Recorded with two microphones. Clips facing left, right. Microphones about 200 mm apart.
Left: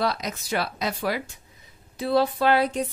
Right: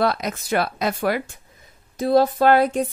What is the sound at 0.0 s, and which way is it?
Speech, 55° right (ahead or behind).